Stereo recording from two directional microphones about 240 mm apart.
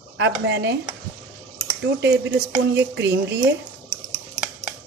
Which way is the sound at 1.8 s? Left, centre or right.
Right.